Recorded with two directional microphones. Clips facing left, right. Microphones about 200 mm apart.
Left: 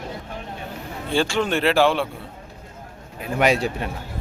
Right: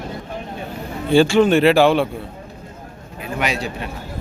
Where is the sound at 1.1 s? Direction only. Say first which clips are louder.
Right 9 dB; 5° right (ahead or behind).